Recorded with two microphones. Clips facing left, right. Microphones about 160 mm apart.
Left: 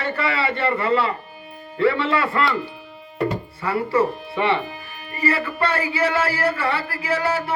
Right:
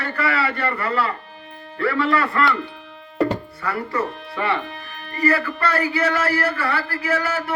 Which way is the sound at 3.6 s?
25° left (ahead or behind).